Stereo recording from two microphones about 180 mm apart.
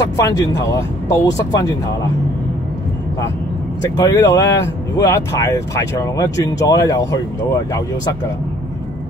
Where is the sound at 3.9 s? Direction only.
20° left (ahead or behind).